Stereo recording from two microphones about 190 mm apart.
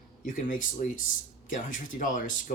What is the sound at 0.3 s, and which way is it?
Speech, 45° left (ahead or behind).